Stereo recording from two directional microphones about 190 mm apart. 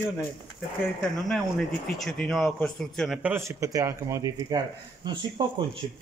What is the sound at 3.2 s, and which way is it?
Speech, 10° right (ahead or behind).